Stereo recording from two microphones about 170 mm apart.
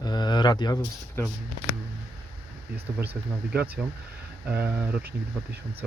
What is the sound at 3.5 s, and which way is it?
Speech, 5° right (ahead or behind).